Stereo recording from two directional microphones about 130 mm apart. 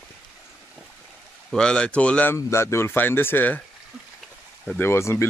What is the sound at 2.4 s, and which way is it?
Speech, 20° left (ahead or behind).